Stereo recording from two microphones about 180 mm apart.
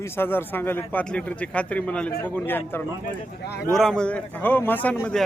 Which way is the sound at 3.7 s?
5° left (ahead or behind).